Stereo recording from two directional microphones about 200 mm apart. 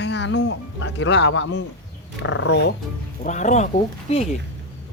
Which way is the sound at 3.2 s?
35° left (ahead or behind).